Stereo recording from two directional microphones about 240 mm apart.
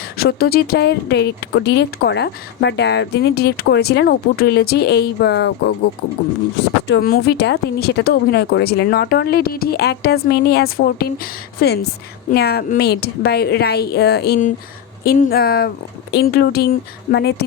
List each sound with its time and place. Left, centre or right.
0.2 s speech: left
6.8 s speech: left